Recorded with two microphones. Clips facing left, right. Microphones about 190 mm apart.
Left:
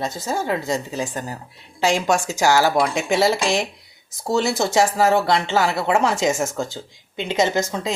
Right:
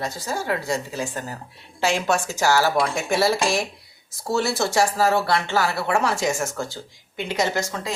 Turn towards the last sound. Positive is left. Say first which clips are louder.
# left 4 dB
turn(degrees=20)  # may be behind; listen again after turning